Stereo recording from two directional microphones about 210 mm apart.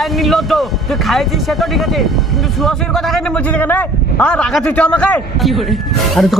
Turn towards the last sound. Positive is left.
turn(degrees=0)  # may be behind; listen again after turning